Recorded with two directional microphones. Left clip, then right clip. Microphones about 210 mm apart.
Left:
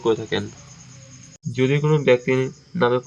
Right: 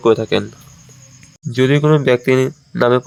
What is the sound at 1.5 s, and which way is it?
Speech, 35° right (ahead or behind).